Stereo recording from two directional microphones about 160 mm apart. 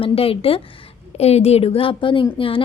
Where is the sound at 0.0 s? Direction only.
35° left (ahead or behind).